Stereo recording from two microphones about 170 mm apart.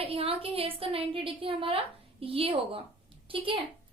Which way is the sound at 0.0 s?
35° right (ahead or behind).